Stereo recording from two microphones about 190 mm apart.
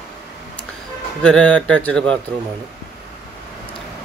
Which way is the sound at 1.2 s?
5° left (ahead or behind).